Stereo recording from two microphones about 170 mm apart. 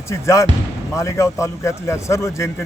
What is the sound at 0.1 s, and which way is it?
A man's voice, 15° left (ahead or behind).